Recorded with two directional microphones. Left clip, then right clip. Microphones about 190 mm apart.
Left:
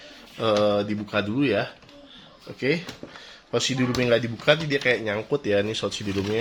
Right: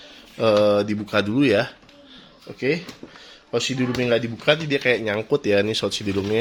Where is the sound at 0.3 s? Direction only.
45° right (ahead or behind).